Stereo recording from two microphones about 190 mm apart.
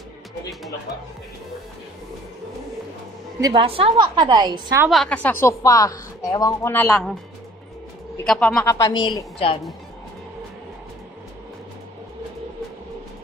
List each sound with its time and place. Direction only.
3.3 s a woman's voice: 20° right (ahead or behind)
3.6 s a woman's voice: 30° right (ahead or behind)
4.8 s a woman's voice: centre (ahead or behind)
8.3 s a woman's voice: 5° left (ahead or behind); by 9.6 s 25° left (ahead or behind)